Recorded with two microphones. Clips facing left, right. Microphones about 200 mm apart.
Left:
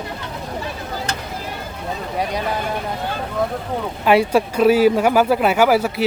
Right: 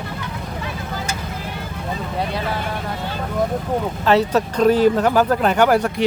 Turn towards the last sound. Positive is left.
turn(degrees=5)  # may be behind; listen again after turning